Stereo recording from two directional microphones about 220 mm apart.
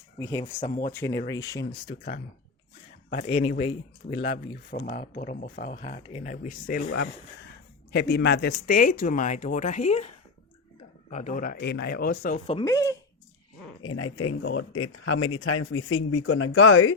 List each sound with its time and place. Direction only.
0.2 s speech: 10° left (ahead or behind)
0.6 s speech: 35° left (ahead or behind)
0.9 s speech: 10° left (ahead or behind)
3.1 s speech: 30° left (ahead or behind)
4.1 s speech: 55° left (ahead or behind)
4.7 s speech: 35° left (ahead or behind)
7.9 s speech: 50° left (ahead or behind); by 10.1 s 30° left (ahead or behind)
11.1 s speech: 35° left (ahead or behind)
12.5 s speech: 20° left (ahead or behind)
13.8 s speech: 75° left (ahead or behind)